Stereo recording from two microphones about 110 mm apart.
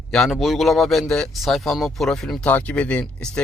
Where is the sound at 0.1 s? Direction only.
Centre (ahead or behind).